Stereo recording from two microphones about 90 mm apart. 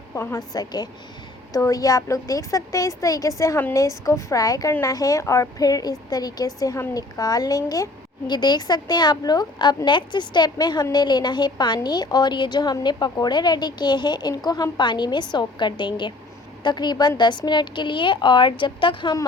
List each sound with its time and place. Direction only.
0.1 s a woman's voice: 30° left (ahead or behind)
0.3 s a woman's voice: 45° left (ahead or behind)
8.3 s a woman's voice: 55° left (ahead or behind)